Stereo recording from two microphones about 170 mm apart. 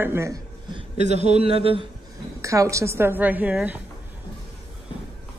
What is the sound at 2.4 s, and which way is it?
Speech, 20° right (ahead or behind).